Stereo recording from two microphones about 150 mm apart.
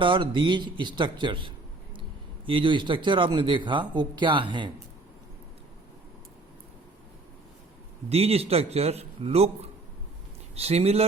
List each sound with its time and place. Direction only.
0.0 s speech: 35° right (ahead or behind)
8.1 s a man's voice: 40° right (ahead or behind)
10.5 s a man's voice: 45° right (ahead or behind)